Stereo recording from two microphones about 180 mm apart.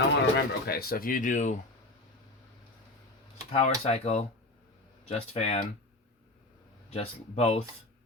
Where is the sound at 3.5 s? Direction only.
35° left (ahead or behind).